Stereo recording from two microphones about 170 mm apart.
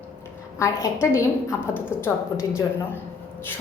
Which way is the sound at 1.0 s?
15° left (ahead or behind).